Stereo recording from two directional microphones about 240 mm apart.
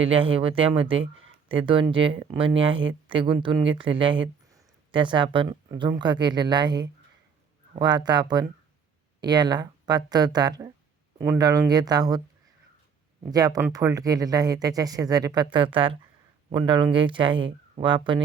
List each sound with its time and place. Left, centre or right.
0.0 s speech: right
13.3 s speech: centre